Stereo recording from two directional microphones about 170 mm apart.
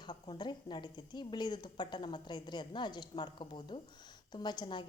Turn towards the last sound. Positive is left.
turn(degrees=25)  # may be behind; listen again after turning